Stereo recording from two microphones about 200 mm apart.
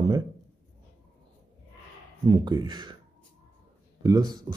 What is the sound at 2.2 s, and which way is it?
Speech, 20° right (ahead or behind).